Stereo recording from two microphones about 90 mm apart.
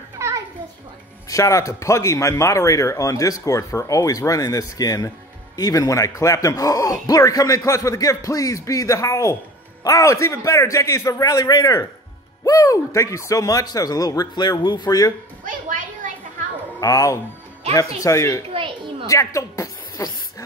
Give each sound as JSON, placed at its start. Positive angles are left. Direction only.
{"t": 0.2, "sound": "children playing", "side_deg": -30}
{"t": 1.3, "sound": "speech", "side_deg": 35}
{"t": 16.8, "sound": "speech", "side_deg": 40}
{"t": 18.5, "sound": "children playing", "side_deg": -75}
{"t": 19.0, "sound": "speech", "side_deg": 35}